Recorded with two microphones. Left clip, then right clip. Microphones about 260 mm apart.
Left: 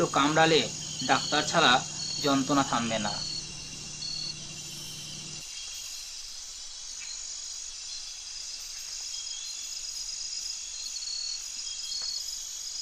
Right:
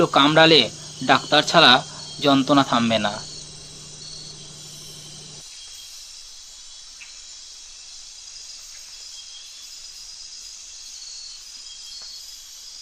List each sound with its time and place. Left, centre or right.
0.0 s speech: right